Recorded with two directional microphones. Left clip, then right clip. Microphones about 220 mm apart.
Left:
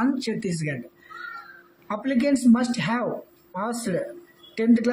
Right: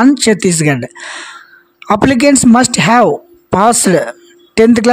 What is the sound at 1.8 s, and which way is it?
Speech, 50° right (ahead or behind).